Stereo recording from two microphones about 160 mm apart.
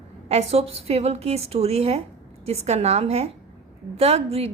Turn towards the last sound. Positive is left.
turn(degrees=-40)  # may be behind; listen again after turning